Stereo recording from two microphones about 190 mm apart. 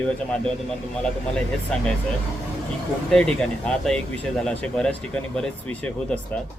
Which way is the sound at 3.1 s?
5° left (ahead or behind).